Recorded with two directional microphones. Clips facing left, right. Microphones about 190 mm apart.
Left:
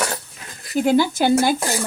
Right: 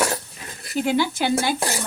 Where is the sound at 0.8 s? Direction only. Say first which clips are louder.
Left 5 dB; 45° left (ahead or behind).